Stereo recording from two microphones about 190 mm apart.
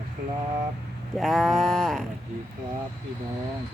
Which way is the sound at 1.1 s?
Centre (ahead or behind).